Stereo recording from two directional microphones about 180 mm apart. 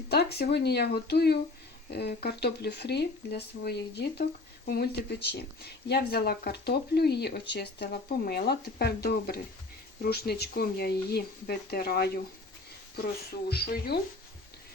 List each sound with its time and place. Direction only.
0.1 s speech: 60° left (ahead or behind)
13.5 s speech: 60° left (ahead or behind)